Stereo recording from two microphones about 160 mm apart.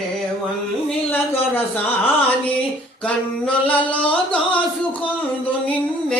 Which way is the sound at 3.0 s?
5° left (ahead or behind).